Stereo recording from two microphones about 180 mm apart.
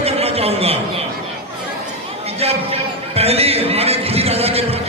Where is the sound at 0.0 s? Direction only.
35° right (ahead or behind).